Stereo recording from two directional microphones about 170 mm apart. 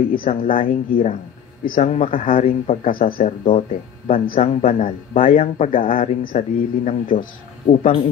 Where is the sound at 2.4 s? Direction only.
35° left (ahead or behind).